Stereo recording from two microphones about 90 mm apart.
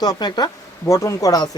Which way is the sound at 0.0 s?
50° left (ahead or behind).